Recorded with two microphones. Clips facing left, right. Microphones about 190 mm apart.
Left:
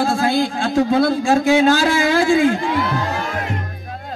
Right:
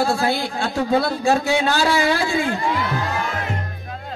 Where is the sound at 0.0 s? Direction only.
50° left (ahead or behind).